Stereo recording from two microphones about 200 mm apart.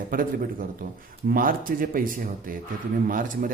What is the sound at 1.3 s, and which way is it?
A man's voice, 45° right (ahead or behind).